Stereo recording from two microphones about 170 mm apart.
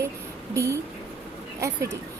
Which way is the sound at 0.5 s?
15° right (ahead or behind).